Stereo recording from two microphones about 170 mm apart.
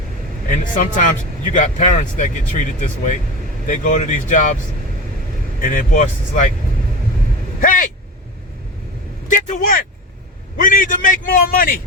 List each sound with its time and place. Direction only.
0.4 s speech: 50° left (ahead or behind)
5.5 s speech: 50° left (ahead or behind)
7.6 s vehicle: 55° left (ahead or behind)
9.3 s a man's voice: 50° left (ahead or behind)